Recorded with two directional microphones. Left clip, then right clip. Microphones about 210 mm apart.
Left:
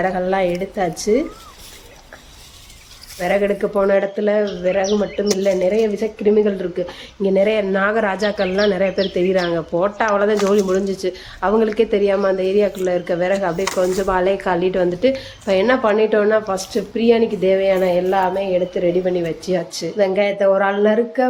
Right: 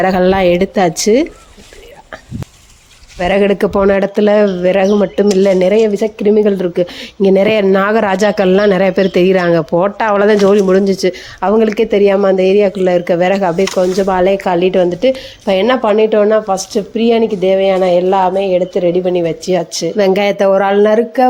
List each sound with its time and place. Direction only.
0.0 s speech: 45° right (ahead or behind)
3.2 s speech: 45° right (ahead or behind)
20.0 s speech: 45° right (ahead or behind)